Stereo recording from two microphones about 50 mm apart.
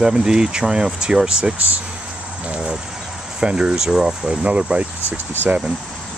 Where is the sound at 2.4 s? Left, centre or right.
Right.